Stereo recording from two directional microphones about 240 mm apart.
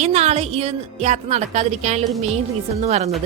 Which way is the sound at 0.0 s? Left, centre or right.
Right.